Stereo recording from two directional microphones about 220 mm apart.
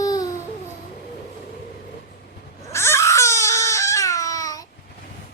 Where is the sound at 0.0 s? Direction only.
15° left (ahead or behind).